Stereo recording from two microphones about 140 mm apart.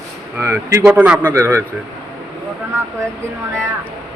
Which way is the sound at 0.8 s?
10° right (ahead or behind).